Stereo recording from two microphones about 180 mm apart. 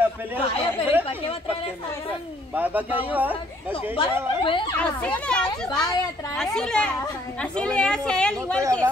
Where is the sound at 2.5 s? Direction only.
10° right (ahead or behind).